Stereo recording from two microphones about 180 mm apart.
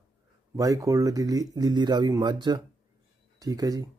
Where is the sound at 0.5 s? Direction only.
20° right (ahead or behind).